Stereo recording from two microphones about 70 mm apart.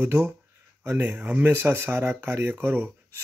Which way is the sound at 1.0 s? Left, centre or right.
Right.